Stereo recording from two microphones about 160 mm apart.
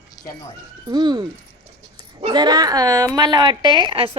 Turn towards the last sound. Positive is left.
turn(degrees=-30)  # may be behind; listen again after turning